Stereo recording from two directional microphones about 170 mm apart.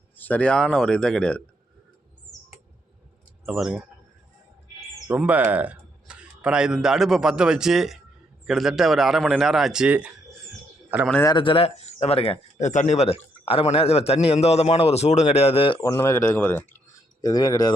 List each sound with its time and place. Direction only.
0.2 s a man's voice: 10° left (ahead or behind)
3.4 s speech: 5° right (ahead or behind)
5.0 s a man's voice: 10° right (ahead or behind)
11.2 s speech: 25° left (ahead or behind)
15.8 s speech: 15° left (ahead or behind)